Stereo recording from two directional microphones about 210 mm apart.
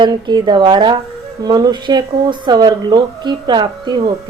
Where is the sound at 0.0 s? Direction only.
20° right (ahead or behind).